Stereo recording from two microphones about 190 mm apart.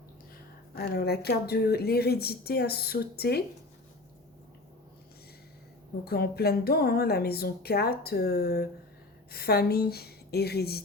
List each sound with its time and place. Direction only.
0.8 s speech: 55° left (ahead or behind)
6.1 s speech: 55° left (ahead or behind)